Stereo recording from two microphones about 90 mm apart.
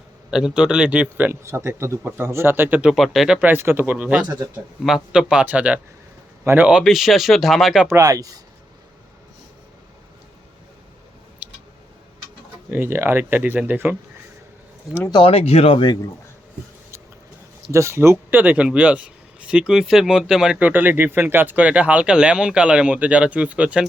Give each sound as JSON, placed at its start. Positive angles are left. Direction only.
{"t": 0.3, "sound": "a man's voice", "side_deg": -5}
{"t": 2.9, "sound": "speech", "side_deg": 0}
{"t": 3.3, "sound": "a man's voice", "side_deg": -20}
{"t": 6.7, "sound": "speech", "side_deg": -5}
{"t": 7.9, "sound": "speech", "side_deg": -35}
{"t": 11.4, "sound": "a sound", "side_deg": -15}
{"t": 12.7, "sound": "a man's voice", "side_deg": -25}
{"t": 15.2, "sound": "speech", "side_deg": 90}
{"t": 17.7, "sound": "speech", "side_deg": -30}
{"t": 20.6, "sound": "speech", "side_deg": -20}